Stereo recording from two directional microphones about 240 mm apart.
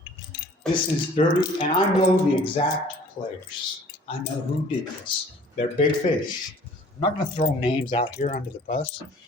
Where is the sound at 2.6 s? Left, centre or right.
Left.